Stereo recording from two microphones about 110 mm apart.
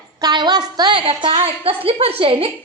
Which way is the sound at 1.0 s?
60° right (ahead or behind).